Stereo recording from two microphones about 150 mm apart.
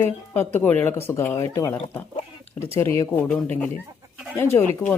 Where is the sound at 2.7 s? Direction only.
20° left (ahead or behind).